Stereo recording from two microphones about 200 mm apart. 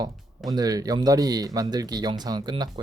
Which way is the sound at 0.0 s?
20° right (ahead or behind).